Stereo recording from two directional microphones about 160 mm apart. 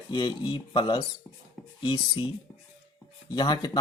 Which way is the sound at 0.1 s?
30° left (ahead or behind).